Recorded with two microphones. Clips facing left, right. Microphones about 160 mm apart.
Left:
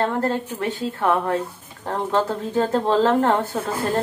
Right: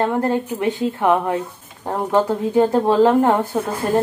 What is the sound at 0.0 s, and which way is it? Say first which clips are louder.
Speech: right 3 dB; 15° right (ahead or behind).